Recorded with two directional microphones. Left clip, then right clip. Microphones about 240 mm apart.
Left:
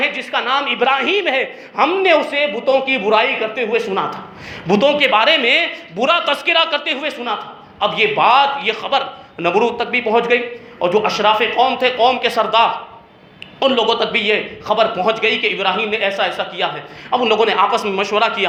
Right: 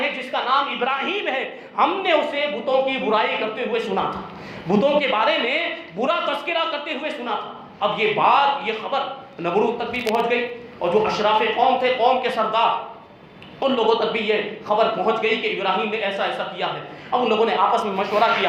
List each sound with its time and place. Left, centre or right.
0.0 s a man's voice: left